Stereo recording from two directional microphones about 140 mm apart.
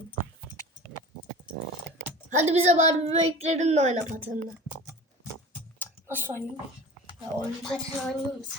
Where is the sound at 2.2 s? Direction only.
55° right (ahead or behind).